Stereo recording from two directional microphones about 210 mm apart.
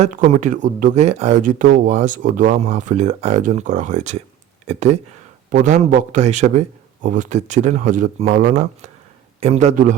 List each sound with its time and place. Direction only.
0.3 s speech: 35° right (ahead or behind)